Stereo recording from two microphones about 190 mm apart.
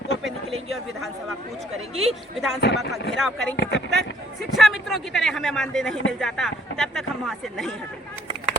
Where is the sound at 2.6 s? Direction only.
65° left (ahead or behind).